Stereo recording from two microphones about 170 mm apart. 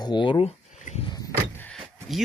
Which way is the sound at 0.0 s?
25° left (ahead or behind).